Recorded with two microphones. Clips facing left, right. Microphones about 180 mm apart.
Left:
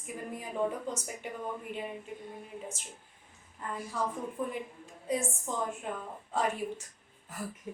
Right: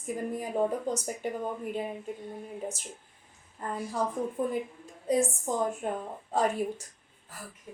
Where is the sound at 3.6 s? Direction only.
40° right (ahead or behind).